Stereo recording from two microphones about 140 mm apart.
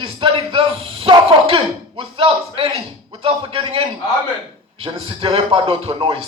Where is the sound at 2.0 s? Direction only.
40° right (ahead or behind).